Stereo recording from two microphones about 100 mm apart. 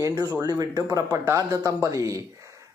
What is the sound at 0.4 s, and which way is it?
A man's voice, 40° right (ahead or behind).